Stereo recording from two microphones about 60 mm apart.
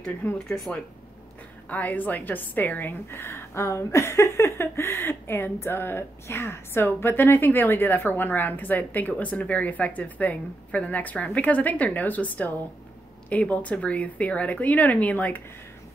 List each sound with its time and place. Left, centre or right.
0.0 s speech: centre
1.7 s a woman's voice: left